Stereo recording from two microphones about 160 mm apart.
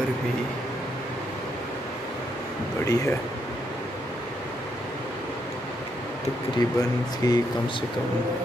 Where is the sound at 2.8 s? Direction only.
20° left (ahead or behind).